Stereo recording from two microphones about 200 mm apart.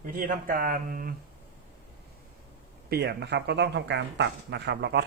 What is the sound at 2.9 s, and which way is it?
Speech, 55° right (ahead or behind).